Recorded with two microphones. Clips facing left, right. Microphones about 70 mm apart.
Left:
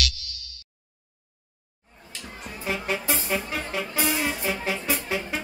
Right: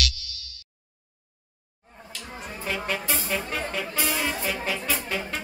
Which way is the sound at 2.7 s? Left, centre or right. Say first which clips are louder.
Left 1 dB; centre.